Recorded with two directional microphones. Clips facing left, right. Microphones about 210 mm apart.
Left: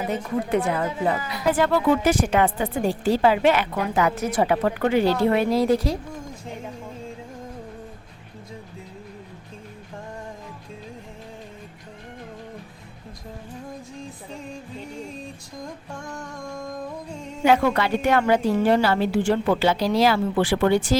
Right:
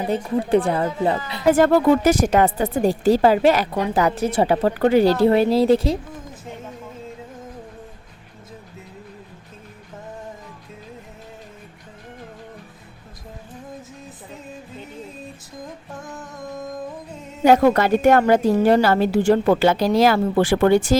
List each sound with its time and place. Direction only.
0.1 s a woman's voice: 30° right (ahead or behind)
1.5 s a woman's voice: 45° right (ahead or behind); by 6.0 s 25° right (ahead or behind)
15.9 s a sound: 5° right (ahead or behind)
17.4 s a woman's voice: 40° right (ahead or behind)